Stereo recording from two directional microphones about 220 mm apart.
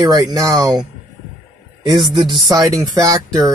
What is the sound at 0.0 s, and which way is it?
Speech, 15° right (ahead or behind).